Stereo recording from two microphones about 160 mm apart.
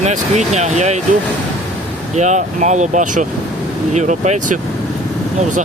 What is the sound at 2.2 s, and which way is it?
Speech, 45° right (ahead or behind).